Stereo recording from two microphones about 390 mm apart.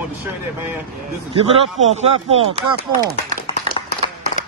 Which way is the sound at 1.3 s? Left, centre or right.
Centre.